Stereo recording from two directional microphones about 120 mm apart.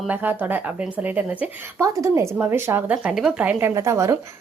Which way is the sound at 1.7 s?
25° right (ahead or behind).